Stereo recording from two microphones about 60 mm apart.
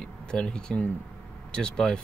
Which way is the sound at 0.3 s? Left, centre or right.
Centre.